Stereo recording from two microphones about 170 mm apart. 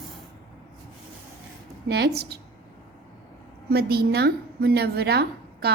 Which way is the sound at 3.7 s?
70° right (ahead or behind).